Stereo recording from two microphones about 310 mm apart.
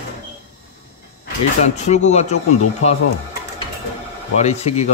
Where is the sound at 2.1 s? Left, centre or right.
Left.